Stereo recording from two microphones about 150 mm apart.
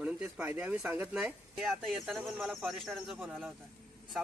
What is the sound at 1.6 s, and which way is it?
A man's voice, centre (ahead or behind).